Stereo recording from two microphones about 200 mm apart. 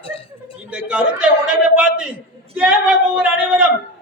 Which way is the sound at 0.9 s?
5° right (ahead or behind).